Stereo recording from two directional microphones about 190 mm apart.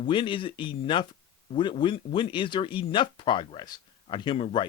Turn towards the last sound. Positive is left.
turn(degrees=25)  # may be behind; listen again after turning